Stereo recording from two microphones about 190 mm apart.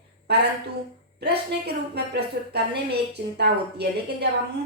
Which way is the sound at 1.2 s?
60° right (ahead or behind).